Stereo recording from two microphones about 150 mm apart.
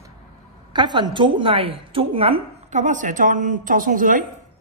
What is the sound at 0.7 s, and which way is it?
A woman's voice, 30° right (ahead or behind).